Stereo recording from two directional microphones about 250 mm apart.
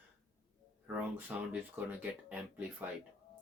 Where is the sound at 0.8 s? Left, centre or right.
Centre.